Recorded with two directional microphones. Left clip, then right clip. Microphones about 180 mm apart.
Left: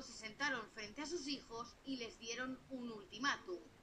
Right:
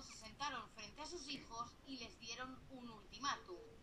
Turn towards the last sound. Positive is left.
turn(degrees=30)  # may be behind; listen again after turning